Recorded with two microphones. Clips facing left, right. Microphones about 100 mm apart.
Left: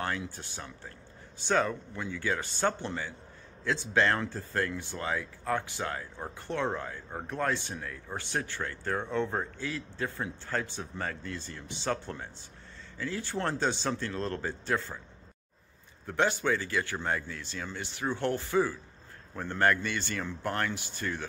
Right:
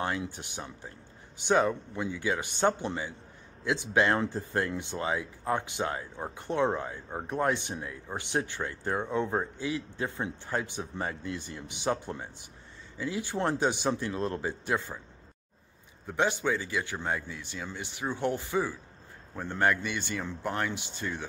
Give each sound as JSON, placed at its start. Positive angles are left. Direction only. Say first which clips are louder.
{"t": 0.0, "sound": "speech", "louder": "right 2 dB", "side_deg": -15}
{"t": 16.1, "sound": "speech", "louder": "even", "side_deg": -15}